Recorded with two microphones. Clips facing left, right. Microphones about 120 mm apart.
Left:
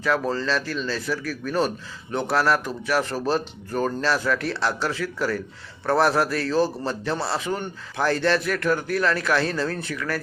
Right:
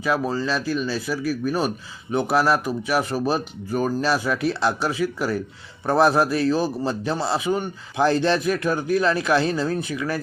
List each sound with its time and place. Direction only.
0.0 s a man's voice: 10° right (ahead or behind)